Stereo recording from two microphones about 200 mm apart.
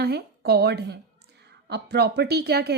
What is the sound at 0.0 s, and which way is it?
A woman's voice, 50° right (ahead or behind).